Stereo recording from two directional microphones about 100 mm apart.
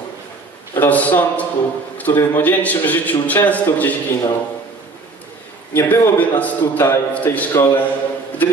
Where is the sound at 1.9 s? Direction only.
20° left (ahead or behind).